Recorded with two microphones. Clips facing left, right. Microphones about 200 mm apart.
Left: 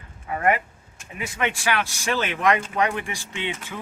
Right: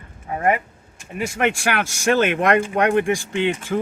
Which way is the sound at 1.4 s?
45° right (ahead or behind).